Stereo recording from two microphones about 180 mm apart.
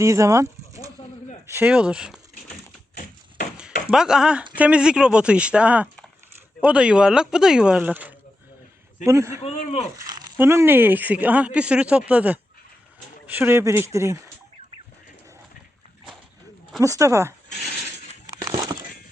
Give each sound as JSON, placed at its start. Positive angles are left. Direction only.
{"t": 0.0, "sound": "bird", "side_deg": -15}
{"t": 1.5, "sound": "speech", "side_deg": -10}
{"t": 3.9, "sound": "speech", "side_deg": -5}
{"t": 9.4, "sound": "speech", "side_deg": 40}
{"t": 10.0, "sound": "speech", "side_deg": -20}
{"t": 16.8, "sound": "speech", "side_deg": -15}
{"t": 17.5, "sound": "a sound", "side_deg": 65}
{"t": 18.4, "sound": "a sound", "side_deg": -20}